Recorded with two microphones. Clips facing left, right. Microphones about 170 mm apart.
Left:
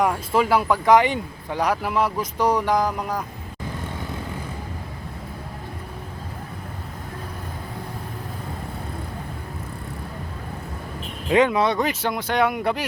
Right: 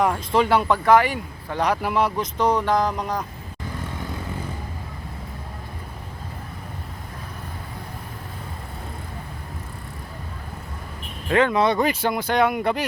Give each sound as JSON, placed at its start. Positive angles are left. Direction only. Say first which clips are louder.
{"t": 0.0, "sound": "speech", "louder": "even", "side_deg": 5}
{"t": 0.9, "sound": "speech", "louder": "left 1 dB", "side_deg": 20}
{"t": 1.5, "sound": "speech", "louder": "right 1 dB", "side_deg": 5}
{"t": 11.3, "sound": "speech", "louder": "left 1 dB", "side_deg": 15}
{"t": 11.6, "sound": "speech", "louder": "right 2 dB", "side_deg": 0}